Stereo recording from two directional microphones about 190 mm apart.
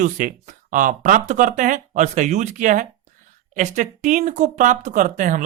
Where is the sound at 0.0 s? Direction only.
40° right (ahead or behind).